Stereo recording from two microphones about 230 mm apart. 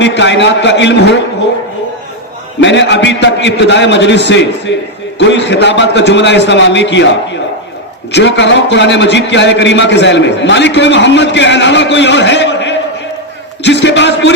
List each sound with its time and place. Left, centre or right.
0.0 s a man's voice: left
2.6 s a man's voice: left
8.1 s a man's voice: left